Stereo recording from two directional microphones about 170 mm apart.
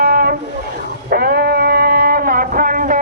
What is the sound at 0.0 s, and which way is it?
Vehicle, 65° right (ahead or behind).